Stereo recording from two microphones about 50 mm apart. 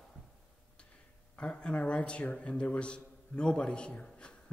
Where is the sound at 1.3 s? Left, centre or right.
Left.